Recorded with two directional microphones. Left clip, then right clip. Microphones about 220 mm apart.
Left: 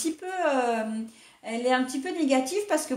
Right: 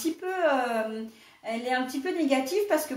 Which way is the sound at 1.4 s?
40° left (ahead or behind).